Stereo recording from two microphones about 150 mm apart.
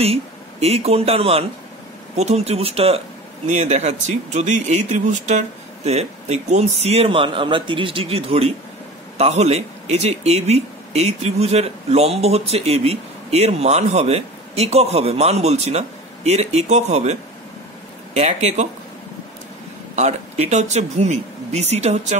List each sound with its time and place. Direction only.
0.0 s a man's voice: 45° right (ahead or behind)
20.0 s speech: 50° right (ahead or behind)